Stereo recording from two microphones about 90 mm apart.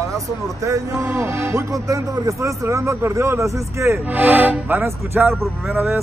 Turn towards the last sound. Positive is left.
turn(degrees=-20)  # may be behind; listen again after turning